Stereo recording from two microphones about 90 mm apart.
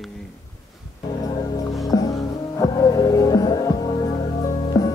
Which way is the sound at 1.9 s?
40° left (ahead or behind).